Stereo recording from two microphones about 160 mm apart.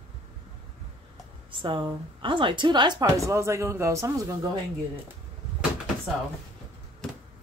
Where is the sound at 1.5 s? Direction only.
30° right (ahead or behind).